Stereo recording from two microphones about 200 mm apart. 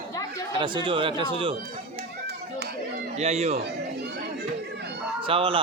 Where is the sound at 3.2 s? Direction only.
35° right (ahead or behind).